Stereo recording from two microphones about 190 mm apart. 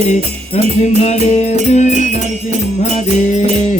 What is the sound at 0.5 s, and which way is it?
Music, 35° left (ahead or behind).